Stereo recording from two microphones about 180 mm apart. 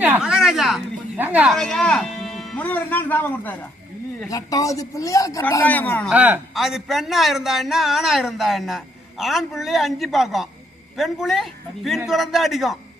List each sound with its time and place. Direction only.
0.0 s a sound: 5° right (ahead or behind)
1.2 s speech: 10° right (ahead or behind)
1.5 s speech: centre (ahead or behind)
6.1 s a man's voice: 10° right (ahead or behind)